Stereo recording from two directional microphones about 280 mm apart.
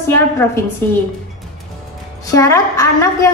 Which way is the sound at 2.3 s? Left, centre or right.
Centre.